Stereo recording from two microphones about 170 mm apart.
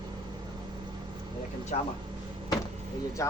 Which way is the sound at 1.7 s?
45° left (ahead or behind).